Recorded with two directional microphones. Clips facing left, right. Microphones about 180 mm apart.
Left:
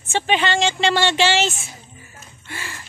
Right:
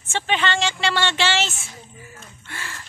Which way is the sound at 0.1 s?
15° left (ahead or behind).